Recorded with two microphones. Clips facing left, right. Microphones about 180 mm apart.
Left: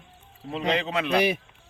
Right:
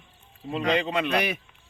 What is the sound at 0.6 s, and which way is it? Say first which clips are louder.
Speech: right 1 dB; 5° left (ahead or behind).